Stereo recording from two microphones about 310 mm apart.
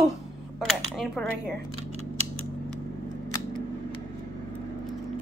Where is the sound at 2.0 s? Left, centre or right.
Centre.